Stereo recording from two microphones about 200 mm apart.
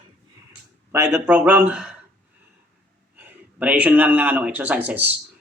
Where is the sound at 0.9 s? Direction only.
15° right (ahead or behind).